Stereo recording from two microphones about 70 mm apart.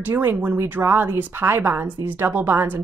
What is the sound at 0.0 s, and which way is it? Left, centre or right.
Speech, right.